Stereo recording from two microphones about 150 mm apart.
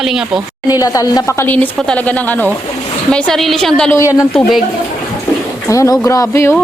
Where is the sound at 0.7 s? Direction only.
25° left (ahead or behind); by 3.9 s 5° left (ahead or behind).